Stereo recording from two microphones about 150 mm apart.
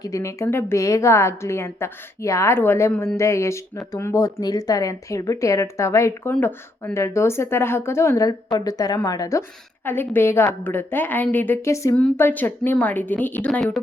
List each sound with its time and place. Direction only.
0.0 s a woman's voice: 20° left (ahead or behind)
6.3 s a woman's voice: 10° left (ahead or behind)
6.9 s a woman's voice: 20° left (ahead or behind)
9.8 s a woman's voice: 15° left (ahead or behind)